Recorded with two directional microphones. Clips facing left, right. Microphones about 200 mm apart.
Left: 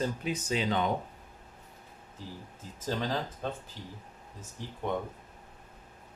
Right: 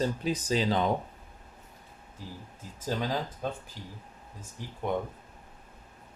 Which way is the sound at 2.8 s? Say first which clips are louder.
Right 1 dB; 10° right (ahead or behind).